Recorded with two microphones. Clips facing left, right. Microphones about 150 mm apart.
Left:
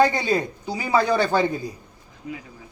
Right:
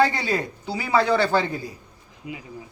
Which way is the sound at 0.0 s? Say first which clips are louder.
Left 2 dB; 20° left (ahead or behind).